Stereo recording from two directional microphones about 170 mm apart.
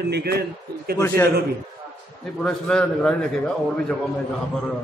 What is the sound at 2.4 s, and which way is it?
A man's voice, 5° left (ahead or behind).